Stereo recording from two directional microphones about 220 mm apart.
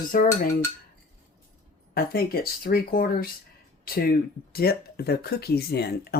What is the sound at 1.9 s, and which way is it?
Speech, 45° left (ahead or behind).